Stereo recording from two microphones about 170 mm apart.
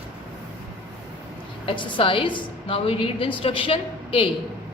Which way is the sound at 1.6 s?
30° left (ahead or behind).